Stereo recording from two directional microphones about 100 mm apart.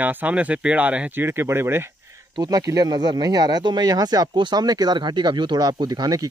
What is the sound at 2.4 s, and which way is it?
Speech, 40° right (ahead or behind).